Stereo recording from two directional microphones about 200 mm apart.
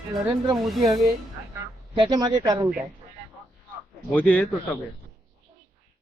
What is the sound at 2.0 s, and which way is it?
Speech, 20° right (ahead or behind).